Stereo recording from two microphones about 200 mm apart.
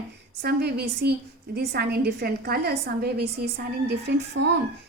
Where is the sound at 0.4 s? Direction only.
55° right (ahead or behind).